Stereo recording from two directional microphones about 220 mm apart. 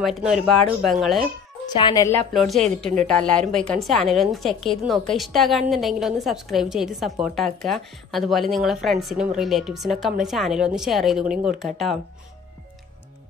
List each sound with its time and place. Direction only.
0.0 s a woman's voice: centre (ahead or behind)
1.7 s speech: 20° left (ahead or behind)
2.3 s a woman's voice: centre (ahead or behind)